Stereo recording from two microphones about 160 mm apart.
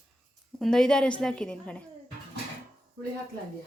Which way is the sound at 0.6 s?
5° left (ahead or behind).